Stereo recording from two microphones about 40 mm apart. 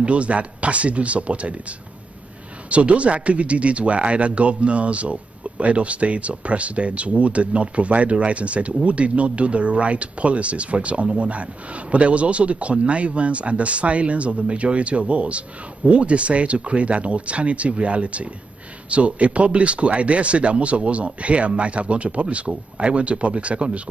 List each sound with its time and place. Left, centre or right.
0.0 s speech: right